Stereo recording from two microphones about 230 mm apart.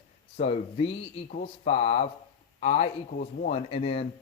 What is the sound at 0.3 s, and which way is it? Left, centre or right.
A man's voice, left.